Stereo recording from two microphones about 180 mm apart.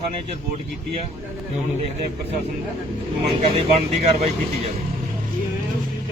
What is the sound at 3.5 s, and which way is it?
Speech, 35° right (ahead or behind).